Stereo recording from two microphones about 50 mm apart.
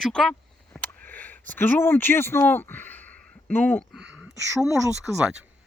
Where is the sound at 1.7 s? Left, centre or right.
Left.